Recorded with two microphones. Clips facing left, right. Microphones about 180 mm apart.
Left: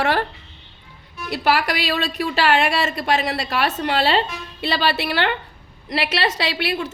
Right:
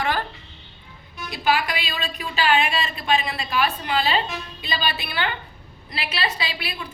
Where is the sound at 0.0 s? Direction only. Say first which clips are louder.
Left 5 dB; 70° left (ahead or behind).